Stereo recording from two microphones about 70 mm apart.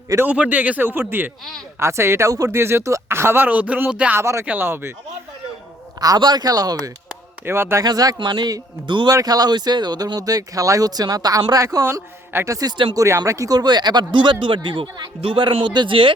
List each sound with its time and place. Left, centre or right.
0.3 s speech: right
1.8 s speech: right
4.2 s speech: right
4.4 s speech: right
6.0 s speech: right
7.4 s speech: right
7.9 s a man's voice: right
11.5 s speech: right
12.5 s a man's voice: right
13.1 s speech: right